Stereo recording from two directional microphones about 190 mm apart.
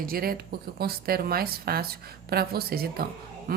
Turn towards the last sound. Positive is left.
turn(degrees=-55)  # may be behind; listen again after turning